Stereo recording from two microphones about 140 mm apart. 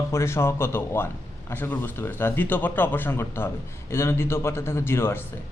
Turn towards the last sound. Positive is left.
turn(degrees=15)  # may be behind; listen again after turning